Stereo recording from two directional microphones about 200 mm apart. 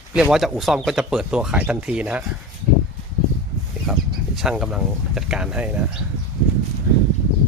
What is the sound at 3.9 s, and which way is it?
Speech, centre (ahead or behind).